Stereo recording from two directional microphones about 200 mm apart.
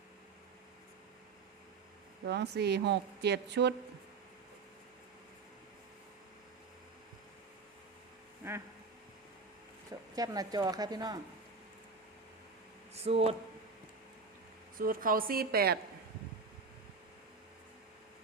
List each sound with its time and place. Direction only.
2.2 s a woman's voice: 55° right (ahead or behind)
8.4 s a sound: 15° right (ahead or behind)
10.2 s speech: 20° right (ahead or behind)
12.9 s speech: 30° right (ahead or behind)
14.8 s a woman's voice: 45° right (ahead or behind)